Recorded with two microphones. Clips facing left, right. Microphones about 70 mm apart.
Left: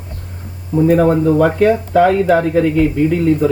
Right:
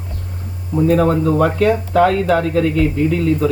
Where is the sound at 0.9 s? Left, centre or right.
Centre.